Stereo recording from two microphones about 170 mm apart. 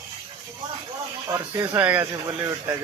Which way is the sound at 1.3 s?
25° right (ahead or behind).